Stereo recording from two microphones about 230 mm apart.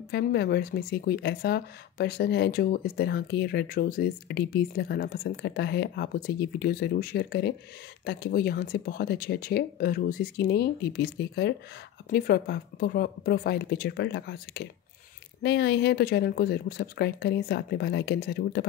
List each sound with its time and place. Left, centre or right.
0.1 s speech: left